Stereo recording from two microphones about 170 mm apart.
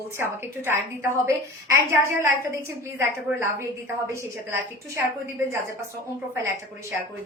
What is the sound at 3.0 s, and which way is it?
Speech, 15° right (ahead or behind).